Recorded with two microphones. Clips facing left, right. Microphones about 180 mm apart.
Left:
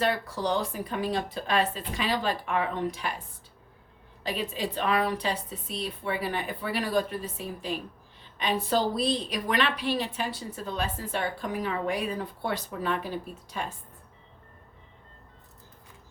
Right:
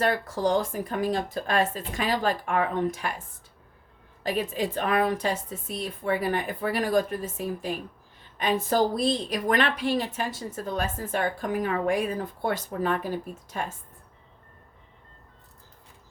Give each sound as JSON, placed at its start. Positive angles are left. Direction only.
{"t": 0.0, "sound": "a woman's voice", "side_deg": -45}
{"t": 4.2, "sound": "a woman's voice", "side_deg": -45}